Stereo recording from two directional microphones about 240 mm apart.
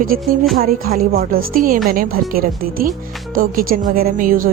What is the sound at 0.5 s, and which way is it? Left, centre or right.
Speech, right.